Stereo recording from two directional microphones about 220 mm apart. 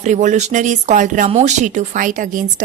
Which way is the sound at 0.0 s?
35° right (ahead or behind).